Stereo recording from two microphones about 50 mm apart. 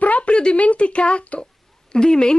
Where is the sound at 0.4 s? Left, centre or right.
Left.